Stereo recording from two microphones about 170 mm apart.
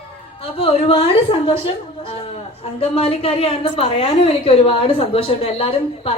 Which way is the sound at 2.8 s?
35° left (ahead or behind).